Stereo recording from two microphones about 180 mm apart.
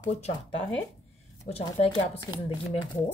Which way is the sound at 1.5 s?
45° left (ahead or behind).